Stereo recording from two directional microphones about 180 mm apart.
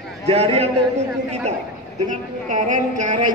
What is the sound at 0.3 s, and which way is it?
Speech, 35° right (ahead or behind).